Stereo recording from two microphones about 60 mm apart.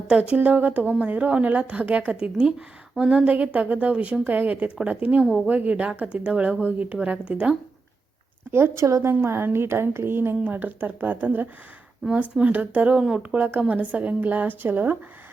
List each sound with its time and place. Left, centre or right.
0.1 s a woman's voice: right
3.3 s a woman's voice: right
8.5 s a woman's voice: right
13.0 s a woman's voice: centre; by 14.9 s right